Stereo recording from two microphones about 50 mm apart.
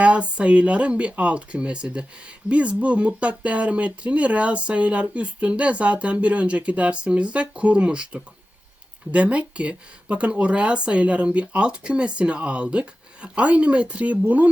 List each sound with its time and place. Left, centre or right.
0.0 s speech: right